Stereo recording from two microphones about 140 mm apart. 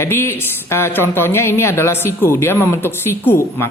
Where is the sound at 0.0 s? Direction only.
15° left (ahead or behind).